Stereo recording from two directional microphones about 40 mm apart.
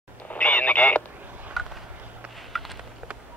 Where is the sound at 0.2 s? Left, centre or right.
Left.